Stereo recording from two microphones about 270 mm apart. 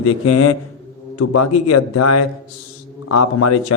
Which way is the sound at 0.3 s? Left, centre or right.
Left.